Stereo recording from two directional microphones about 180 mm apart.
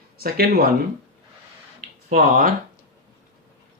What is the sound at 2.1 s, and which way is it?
Speech, 50° right (ahead or behind).